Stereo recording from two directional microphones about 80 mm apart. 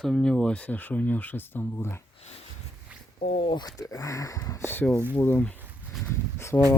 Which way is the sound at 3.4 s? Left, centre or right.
Left.